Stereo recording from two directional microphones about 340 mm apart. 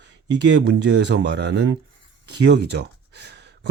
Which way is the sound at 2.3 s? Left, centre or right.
Right.